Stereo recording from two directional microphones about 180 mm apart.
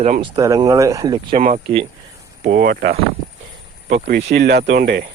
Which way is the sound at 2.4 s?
50° right (ahead or behind).